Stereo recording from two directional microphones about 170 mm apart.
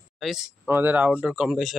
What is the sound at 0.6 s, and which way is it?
Speech, 10° right (ahead or behind).